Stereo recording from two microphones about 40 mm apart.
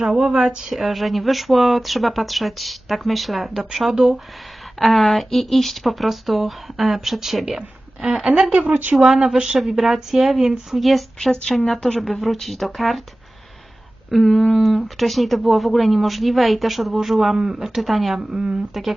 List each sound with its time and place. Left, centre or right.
0.0 s speech: centre
0.7 s speech: centre
4.8 s speech: centre
8.6 s speech: right
9.0 s speech: centre
11.3 s a woman's voice: centre
14.1 s speech: centre
18.2 s speech: centre
18.7 s speech: centre